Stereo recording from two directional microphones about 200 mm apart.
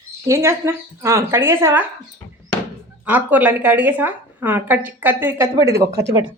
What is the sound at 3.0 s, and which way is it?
A woman's voice, 10° right (ahead or behind).